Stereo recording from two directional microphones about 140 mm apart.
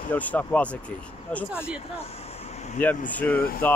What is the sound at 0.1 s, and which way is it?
Speech, 10° left (ahead or behind).